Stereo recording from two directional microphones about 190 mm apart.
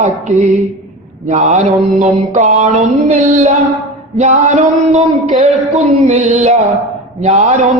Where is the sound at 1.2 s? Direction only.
40° right (ahead or behind).